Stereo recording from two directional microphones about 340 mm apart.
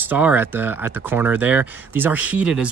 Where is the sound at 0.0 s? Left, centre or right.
Centre.